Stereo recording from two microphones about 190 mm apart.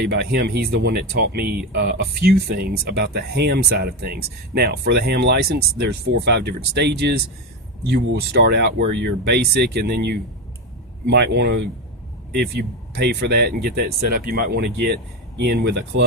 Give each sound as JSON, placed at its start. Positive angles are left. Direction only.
{"t": 0.0, "sound": "speech", "side_deg": -60}